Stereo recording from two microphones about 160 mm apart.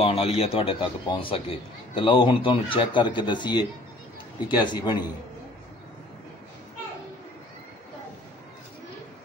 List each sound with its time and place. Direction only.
0.0 s speech: 35° left (ahead or behind)